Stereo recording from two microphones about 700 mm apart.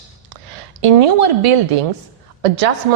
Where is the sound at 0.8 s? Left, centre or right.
Right.